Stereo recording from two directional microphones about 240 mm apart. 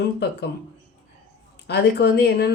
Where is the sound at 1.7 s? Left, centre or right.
Left.